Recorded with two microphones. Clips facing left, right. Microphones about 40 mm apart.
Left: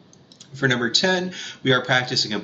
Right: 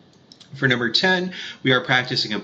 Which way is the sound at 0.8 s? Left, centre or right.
Centre.